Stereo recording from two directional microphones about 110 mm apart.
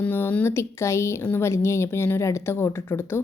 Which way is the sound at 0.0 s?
15° left (ahead or behind).